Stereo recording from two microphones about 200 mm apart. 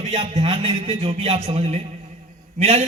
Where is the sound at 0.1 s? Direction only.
30° right (ahead or behind).